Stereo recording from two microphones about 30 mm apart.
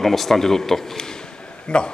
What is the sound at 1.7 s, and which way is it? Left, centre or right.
Speech, left.